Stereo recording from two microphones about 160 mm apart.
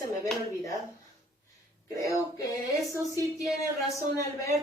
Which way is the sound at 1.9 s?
20° left (ahead or behind).